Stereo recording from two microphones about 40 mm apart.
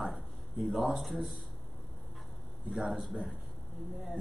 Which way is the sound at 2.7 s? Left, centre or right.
Centre.